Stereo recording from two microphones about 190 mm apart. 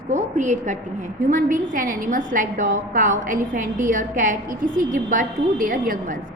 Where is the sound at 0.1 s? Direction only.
40° right (ahead or behind).